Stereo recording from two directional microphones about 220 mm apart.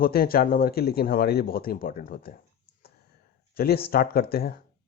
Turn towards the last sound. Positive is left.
turn(degrees=45)  # may be behind; listen again after turning